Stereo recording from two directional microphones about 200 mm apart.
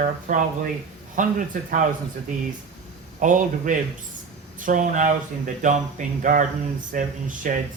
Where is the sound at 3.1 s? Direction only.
40° right (ahead or behind).